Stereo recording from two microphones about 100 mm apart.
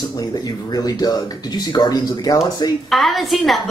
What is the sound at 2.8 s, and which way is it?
Speech, centre (ahead or behind).